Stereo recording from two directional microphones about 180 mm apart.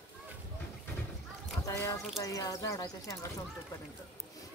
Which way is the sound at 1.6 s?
15° left (ahead or behind).